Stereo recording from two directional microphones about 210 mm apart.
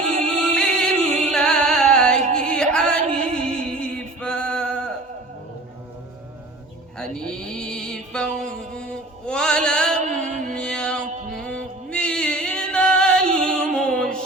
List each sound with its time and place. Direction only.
0.3 s music: 5° left (ahead or behind)
7.0 s a sound: 5° left (ahead or behind)
10.0 s music: 35° right (ahead or behind)
10.5 s music: 5° left (ahead or behind)